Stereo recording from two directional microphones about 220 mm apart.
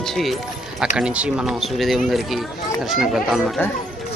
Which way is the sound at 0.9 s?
5° right (ahead or behind).